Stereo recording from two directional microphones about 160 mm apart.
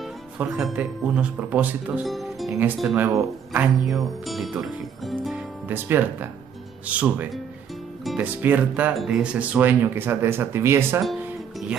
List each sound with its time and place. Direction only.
0.4 s speech: 5° right (ahead or behind)
3.1 s speech: 20° right (ahead or behind)
3.8 s speech: centre (ahead or behind)